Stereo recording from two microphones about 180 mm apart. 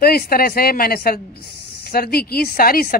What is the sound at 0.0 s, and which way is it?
Speech, 55° left (ahead or behind).